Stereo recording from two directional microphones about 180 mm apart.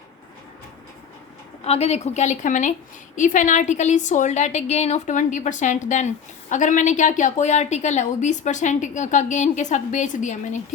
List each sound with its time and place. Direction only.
1.6 s a woman's voice: 35° left (ahead or behind)